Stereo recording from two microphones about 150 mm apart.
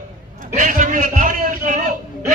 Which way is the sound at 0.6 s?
60° right (ahead or behind).